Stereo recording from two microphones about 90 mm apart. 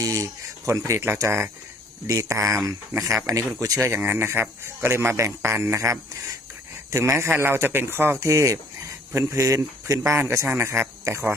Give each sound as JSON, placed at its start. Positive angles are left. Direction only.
{"t": 0.0, "sound": "a sound", "side_deg": -35}
{"t": 0.9, "sound": "speech", "side_deg": -25}
{"t": 3.8, "sound": "speech", "side_deg": -25}